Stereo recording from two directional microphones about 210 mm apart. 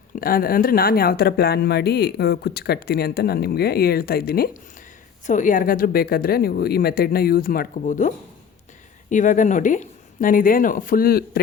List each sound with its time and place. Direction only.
0.2 s a woman's voice: 45° left (ahead or behind)